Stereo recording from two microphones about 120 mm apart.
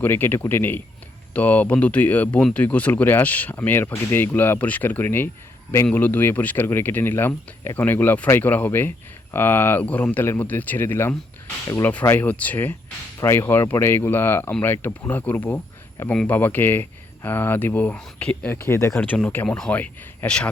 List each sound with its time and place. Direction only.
0.0 s speech: 20° left (ahead or behind)
18.9 s speech: 10° left (ahead or behind)